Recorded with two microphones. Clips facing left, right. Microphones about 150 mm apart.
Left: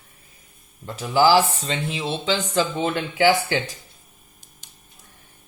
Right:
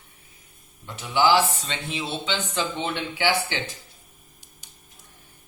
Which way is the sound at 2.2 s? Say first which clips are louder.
Left 9 dB; 40° left (ahead or behind).